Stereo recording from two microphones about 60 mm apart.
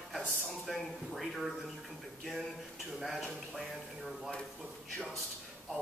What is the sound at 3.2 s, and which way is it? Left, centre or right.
Speech, centre.